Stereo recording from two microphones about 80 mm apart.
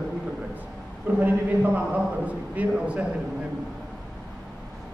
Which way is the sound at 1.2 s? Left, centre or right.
Right.